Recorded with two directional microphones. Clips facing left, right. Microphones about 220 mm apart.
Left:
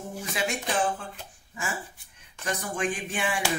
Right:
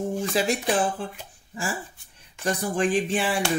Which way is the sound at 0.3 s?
35° right (ahead or behind).